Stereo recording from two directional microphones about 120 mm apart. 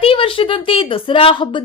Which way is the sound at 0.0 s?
50° left (ahead or behind).